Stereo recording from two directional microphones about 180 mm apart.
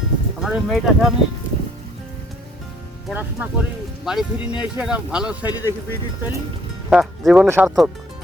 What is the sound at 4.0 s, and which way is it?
Speech, centre (ahead or behind).